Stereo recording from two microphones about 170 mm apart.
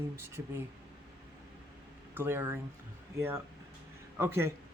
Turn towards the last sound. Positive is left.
turn(degrees=-15)  # may be behind; listen again after turning